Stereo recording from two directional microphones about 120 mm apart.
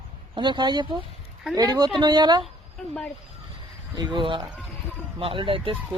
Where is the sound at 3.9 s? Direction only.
40° right (ahead or behind).